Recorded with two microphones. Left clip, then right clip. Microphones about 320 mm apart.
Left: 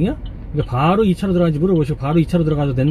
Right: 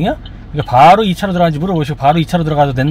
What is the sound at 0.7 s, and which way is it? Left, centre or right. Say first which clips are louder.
Speech: right 11 dB; right.